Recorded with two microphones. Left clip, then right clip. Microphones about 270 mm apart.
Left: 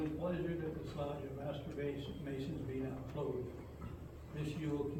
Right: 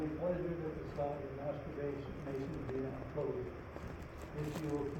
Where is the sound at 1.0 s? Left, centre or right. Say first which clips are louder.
Right 4 dB; left.